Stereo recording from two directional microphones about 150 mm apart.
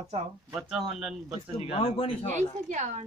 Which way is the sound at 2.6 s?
50° right (ahead or behind).